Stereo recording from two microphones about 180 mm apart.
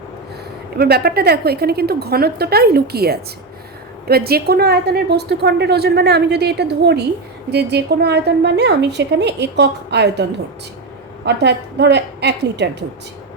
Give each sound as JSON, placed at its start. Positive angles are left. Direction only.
{"t": 0.8, "sound": "a woman's voice", "side_deg": -60}
{"t": 11.3, "sound": "a woman's voice", "side_deg": -70}